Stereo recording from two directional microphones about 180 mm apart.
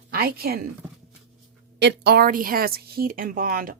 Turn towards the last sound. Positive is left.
turn(degrees=-55)  # may be behind; listen again after turning